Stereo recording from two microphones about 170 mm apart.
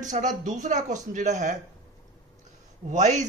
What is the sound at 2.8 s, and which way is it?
Speech, 45° right (ahead or behind).